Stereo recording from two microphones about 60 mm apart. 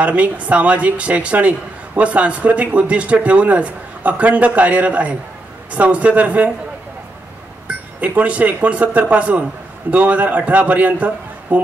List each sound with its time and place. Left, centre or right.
0.0 s speech: right
8.2 s speech: right